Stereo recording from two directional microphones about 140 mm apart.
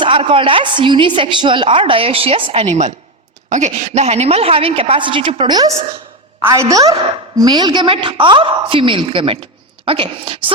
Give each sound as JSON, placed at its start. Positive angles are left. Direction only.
{"t": 0.0, "sound": "a woman's voice", "side_deg": -40}